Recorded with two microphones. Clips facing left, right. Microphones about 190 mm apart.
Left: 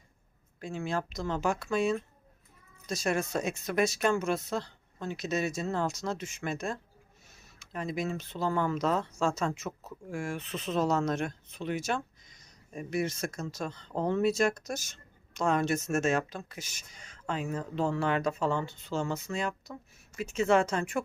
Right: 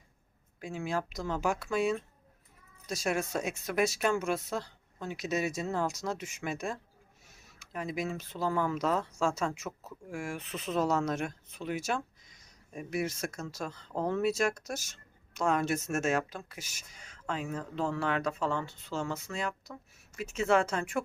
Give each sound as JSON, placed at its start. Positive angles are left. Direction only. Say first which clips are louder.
{"t": 0.6, "sound": "speech", "louder": "left 1 dB", "side_deg": -10}